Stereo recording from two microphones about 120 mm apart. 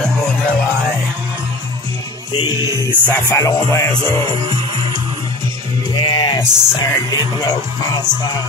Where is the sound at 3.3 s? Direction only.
25° left (ahead or behind).